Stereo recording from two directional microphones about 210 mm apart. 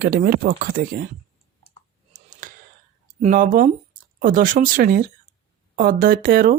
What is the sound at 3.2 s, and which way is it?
Speech, 40° right (ahead or behind).